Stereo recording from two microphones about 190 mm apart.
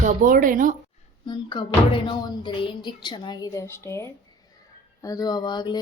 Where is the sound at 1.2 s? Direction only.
25° left (ahead or behind).